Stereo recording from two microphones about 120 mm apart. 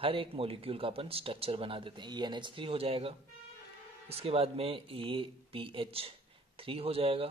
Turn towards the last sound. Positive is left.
turn(degrees=-50)  # may be behind; listen again after turning